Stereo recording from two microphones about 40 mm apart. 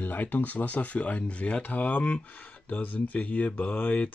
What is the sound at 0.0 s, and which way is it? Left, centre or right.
Speech, left.